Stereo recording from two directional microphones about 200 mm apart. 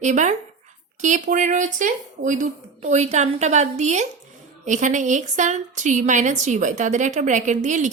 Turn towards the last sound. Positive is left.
turn(degrees=-35)  # may be behind; listen again after turning